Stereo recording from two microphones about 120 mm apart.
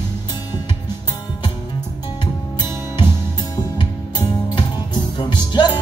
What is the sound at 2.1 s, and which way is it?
Music, 35° left (ahead or behind).